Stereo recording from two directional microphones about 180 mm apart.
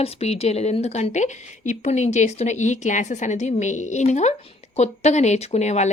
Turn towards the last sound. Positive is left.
turn(degrees=40)  # may be behind; listen again after turning